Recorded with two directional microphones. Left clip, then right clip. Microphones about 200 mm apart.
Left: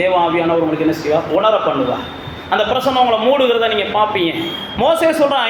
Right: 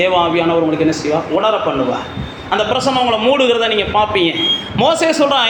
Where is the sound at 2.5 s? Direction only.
25° right (ahead or behind).